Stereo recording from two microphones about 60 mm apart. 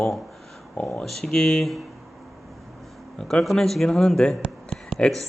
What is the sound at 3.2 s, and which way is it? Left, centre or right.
A man's voice, centre.